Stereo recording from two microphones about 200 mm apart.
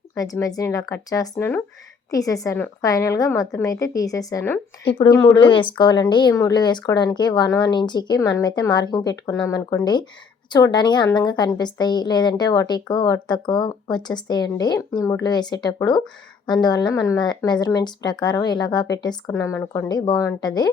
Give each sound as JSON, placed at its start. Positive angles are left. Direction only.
{"t": 0.1, "sound": "a woman's voice", "side_deg": 15}
{"t": 4.9, "sound": "a woman's voice", "side_deg": 25}